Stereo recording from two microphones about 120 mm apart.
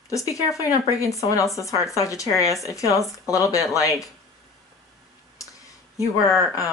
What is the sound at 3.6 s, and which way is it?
Speech, centre (ahead or behind).